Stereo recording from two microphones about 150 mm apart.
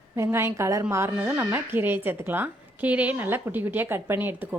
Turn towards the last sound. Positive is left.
turn(degrees=-10)  # may be behind; listen again after turning